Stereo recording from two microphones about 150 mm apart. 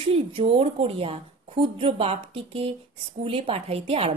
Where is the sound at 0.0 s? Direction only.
40° right (ahead or behind).